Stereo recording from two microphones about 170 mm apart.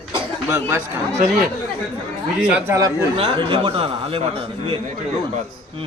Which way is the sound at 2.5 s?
15° right (ahead or behind).